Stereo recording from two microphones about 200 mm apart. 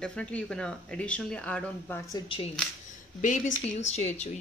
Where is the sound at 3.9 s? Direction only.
35° left (ahead or behind).